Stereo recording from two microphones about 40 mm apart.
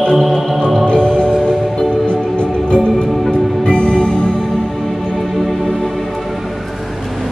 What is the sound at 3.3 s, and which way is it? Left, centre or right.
Music, left.